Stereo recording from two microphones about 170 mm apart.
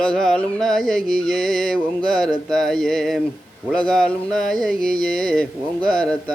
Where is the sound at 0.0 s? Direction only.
5° left (ahead or behind).